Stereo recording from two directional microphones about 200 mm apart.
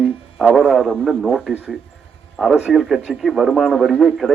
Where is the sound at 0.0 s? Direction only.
Centre (ahead or behind).